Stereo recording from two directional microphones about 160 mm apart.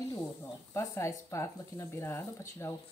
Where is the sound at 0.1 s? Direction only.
15° left (ahead or behind).